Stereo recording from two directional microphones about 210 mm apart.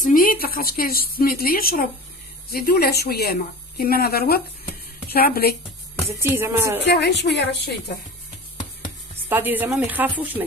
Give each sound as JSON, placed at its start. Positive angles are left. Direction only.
{"t": 0.0, "sound": "a sound", "side_deg": 40}
{"t": 1.1, "sound": "a woman's voice", "side_deg": 45}
{"t": 6.1, "sound": "speech", "side_deg": -10}
{"t": 6.9, "sound": "a woman's voice", "side_deg": 55}
{"t": 9.3, "sound": "speech", "side_deg": -10}